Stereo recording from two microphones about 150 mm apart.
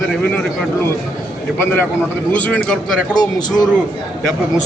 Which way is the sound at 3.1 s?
25° left (ahead or behind).